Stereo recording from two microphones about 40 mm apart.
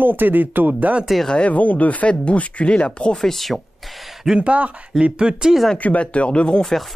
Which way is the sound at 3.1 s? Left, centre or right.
Centre.